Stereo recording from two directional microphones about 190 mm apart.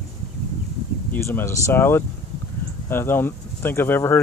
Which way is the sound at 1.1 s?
10° left (ahead or behind).